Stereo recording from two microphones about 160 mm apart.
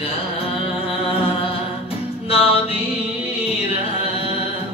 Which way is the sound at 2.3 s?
35° left (ahead or behind).